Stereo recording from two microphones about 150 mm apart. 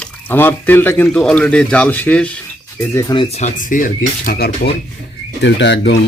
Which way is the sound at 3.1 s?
35° left (ahead or behind).